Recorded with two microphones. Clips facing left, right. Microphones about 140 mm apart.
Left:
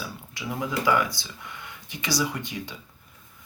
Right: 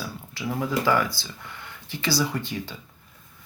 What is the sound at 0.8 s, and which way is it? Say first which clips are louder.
Speech: left 2 dB; 15° left (ahead or behind).